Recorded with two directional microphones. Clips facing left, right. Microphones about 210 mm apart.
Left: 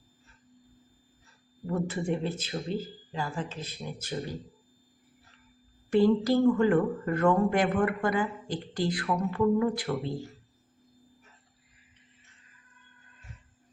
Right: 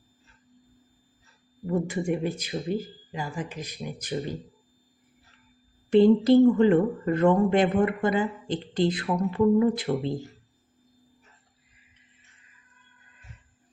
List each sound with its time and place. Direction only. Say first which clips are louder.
1.7 s speech: right 3 dB; 15° right (ahead or behind)
5.9 s speech: right 6 dB; 25° right (ahead or behind)